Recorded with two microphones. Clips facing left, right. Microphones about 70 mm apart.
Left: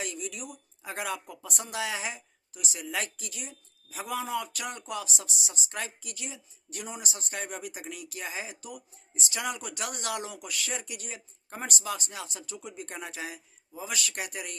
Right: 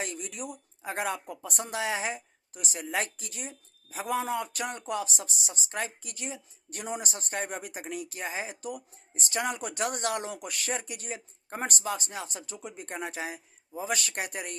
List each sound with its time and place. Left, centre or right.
0.0 s speech: right
2.5 s speech: right